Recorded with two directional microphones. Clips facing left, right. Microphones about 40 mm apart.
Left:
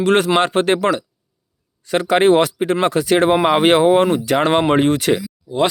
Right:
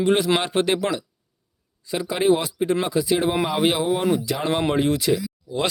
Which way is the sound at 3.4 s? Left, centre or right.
Left.